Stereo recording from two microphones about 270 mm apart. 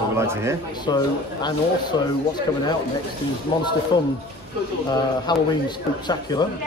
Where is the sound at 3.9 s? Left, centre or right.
Centre.